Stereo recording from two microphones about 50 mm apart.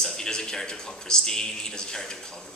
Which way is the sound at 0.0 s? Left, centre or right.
Centre.